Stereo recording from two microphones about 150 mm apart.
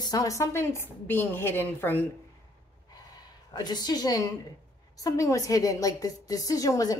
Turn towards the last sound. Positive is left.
turn(degrees=25)  # may be behind; listen again after turning